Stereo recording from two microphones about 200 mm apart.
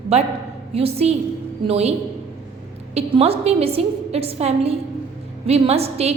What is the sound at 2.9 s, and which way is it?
A woman's voice, 30° right (ahead or behind).